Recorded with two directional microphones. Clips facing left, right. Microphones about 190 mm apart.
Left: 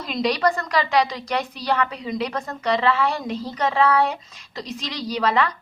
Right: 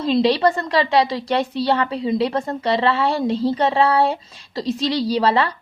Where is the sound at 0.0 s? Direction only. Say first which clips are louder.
Right 5 dB; 30° right (ahead or behind).